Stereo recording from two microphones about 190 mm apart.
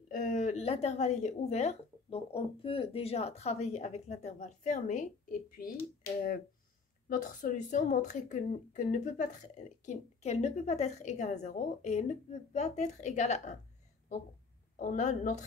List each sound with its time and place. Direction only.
0.1 s speech: 45° left (ahead or behind)
5.6 s speech: 50° left (ahead or behind)
7.1 s speech: 45° left (ahead or behind)
14.8 s speech: 40° left (ahead or behind)